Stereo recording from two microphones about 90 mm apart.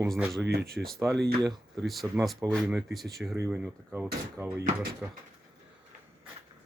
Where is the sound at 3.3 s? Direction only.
30° right (ahead or behind).